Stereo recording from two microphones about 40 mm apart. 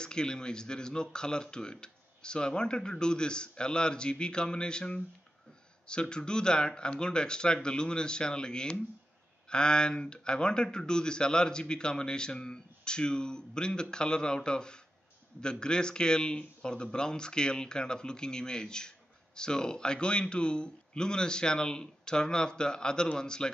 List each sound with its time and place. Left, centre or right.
0.0 s speech: centre